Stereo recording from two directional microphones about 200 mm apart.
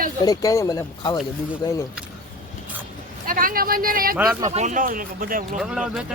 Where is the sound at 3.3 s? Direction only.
45° right (ahead or behind).